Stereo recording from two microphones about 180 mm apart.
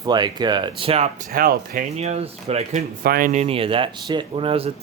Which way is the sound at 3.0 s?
50° right (ahead or behind).